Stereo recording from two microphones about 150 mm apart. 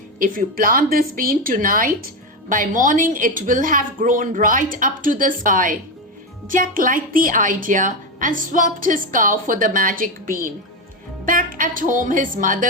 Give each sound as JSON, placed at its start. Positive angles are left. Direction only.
{"t": 0.2, "sound": "a woman's voice", "side_deg": -70}